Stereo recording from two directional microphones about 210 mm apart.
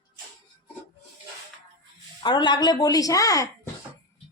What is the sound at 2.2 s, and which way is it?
A woman's voice, 20° left (ahead or behind).